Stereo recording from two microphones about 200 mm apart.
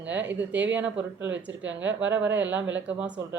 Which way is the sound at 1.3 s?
65° right (ahead or behind).